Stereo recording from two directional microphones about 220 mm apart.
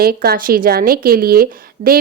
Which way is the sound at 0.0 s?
45° right (ahead or behind).